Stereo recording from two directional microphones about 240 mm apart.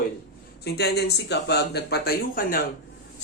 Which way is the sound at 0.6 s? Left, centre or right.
Left.